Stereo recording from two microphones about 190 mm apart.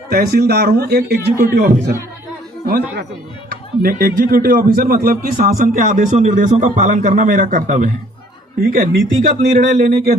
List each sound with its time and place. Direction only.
0.1 s a man's voice: 55° right (ahead or behind)
3.8 s a man's voice: 50° right (ahead or behind)
9.9 s a man's voice: 55° right (ahead or behind)